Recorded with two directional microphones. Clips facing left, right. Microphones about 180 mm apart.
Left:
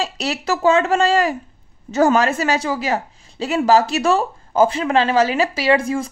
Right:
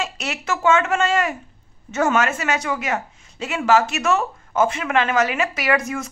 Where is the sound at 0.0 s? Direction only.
35° left (ahead or behind).